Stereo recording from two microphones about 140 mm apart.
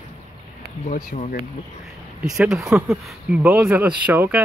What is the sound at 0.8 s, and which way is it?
Speech, 60° left (ahead or behind).